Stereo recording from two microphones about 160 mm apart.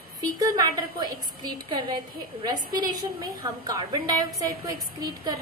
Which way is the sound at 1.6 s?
35° right (ahead or behind).